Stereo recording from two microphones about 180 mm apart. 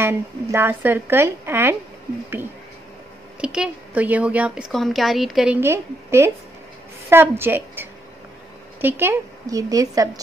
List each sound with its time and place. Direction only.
0.0 s a woman's voice: 10° right (ahead or behind)
3.3 s a woman's voice: 5° right (ahead or behind)